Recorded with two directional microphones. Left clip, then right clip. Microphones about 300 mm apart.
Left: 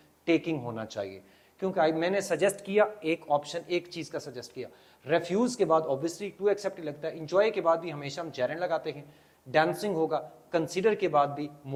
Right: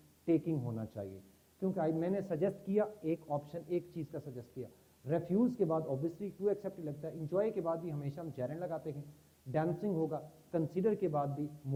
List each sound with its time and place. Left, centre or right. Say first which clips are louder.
0.3 s a man's voice: left 6 dB; centre
9.9 s speech: left 9 dB; left
10.5 s a man's voice: left 8 dB; centre